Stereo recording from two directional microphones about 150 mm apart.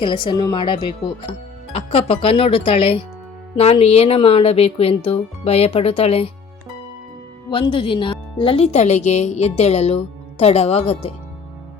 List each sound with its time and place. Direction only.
0.0 s speech: 30° left (ahead or behind)
7.5 s speech: 35° left (ahead or behind)